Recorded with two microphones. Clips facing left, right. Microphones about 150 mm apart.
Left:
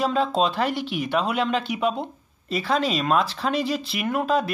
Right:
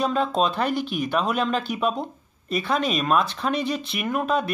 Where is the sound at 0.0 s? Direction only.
25° left (ahead or behind).